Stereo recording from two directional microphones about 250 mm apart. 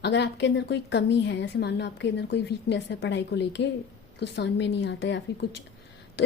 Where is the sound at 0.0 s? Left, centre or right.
Left.